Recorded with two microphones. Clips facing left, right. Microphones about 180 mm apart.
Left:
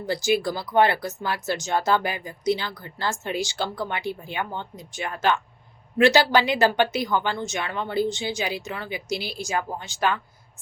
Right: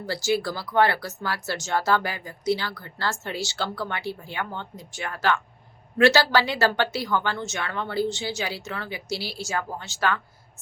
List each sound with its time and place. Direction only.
0.0 s speech: 15° left (ahead or behind)